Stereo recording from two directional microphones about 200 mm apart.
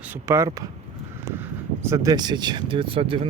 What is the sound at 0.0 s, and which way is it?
Speech, 10° right (ahead or behind).